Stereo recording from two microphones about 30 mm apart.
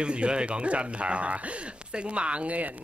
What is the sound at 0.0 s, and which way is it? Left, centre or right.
Speech, right.